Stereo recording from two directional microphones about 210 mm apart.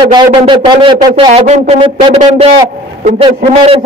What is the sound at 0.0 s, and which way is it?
Speech, 25° right (ahead or behind).